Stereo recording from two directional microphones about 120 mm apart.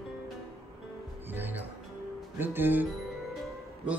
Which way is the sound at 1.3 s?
15° right (ahead or behind).